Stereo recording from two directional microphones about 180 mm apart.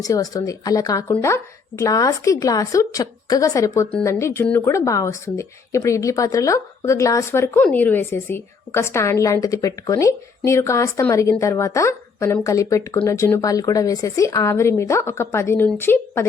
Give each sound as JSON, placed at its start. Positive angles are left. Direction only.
{"t": 0.0, "sound": "a woman's voice", "side_deg": 20}